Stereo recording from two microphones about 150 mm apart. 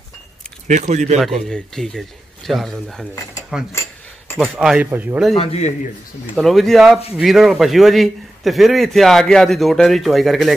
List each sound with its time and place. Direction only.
0.7 s speech: 50° right (ahead or behind)
1.2 s a man's voice: 5° left (ahead or behind)
5.3 s a man's voice: 45° left (ahead or behind)
6.3 s a man's voice: centre (ahead or behind)